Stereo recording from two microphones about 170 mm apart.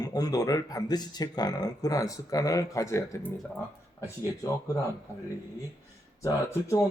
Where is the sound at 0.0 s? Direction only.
20° left (ahead or behind).